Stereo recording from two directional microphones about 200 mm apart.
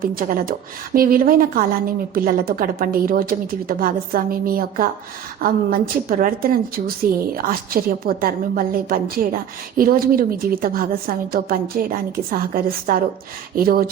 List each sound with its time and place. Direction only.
0.0 s a woman's voice: 45° right (ahead or behind)